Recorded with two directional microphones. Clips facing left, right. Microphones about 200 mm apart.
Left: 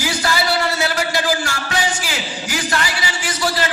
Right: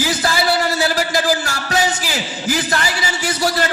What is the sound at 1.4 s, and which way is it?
Music, 40° right (ahead or behind).